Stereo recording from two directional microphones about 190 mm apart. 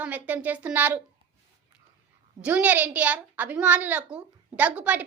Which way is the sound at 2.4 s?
10° right (ahead or behind).